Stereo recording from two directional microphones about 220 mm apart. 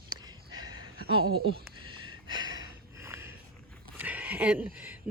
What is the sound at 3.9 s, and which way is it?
Speech, 5° right (ahead or behind).